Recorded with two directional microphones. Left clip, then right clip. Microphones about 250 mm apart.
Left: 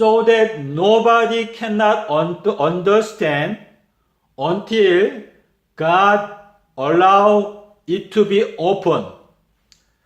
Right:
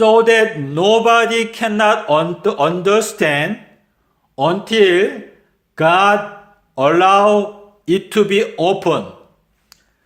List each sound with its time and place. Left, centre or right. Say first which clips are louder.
0.0 s a man's voice: right 2 dB; right